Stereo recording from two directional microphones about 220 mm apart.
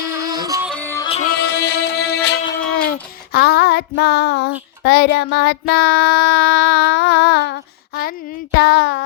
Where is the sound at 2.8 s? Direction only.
45° left (ahead or behind).